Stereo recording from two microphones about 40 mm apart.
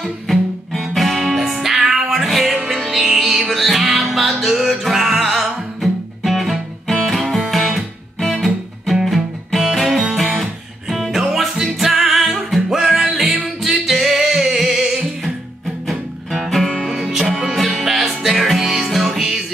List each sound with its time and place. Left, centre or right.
0.9 s music: centre
5.1 s music: centre
5.4 s music: centre
7.4 s guitar: centre
9.0 s music: centre